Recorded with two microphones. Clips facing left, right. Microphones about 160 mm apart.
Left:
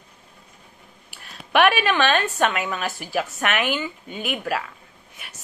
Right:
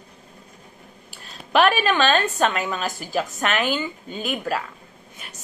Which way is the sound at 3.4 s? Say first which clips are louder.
Right 1 dB; 35° right (ahead or behind).